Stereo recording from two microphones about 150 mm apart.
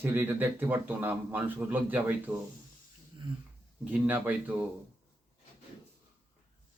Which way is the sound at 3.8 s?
10° right (ahead or behind).